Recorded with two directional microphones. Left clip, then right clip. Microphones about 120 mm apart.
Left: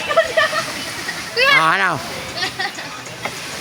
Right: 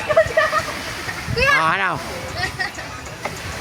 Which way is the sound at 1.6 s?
35° left (ahead or behind).